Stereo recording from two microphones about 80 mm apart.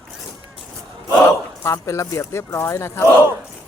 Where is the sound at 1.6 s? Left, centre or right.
Left.